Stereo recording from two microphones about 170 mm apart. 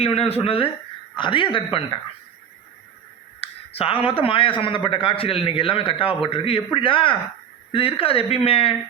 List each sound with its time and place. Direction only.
0.0 s a man's voice: 35° left (ahead or behind)
3.4 s a man's voice: 35° left (ahead or behind)